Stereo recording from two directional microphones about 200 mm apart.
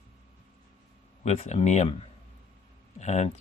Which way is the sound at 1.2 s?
35° left (ahead or behind).